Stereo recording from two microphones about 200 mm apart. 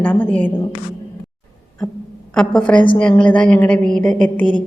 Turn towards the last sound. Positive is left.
turn(degrees=5)  # may be behind; listen again after turning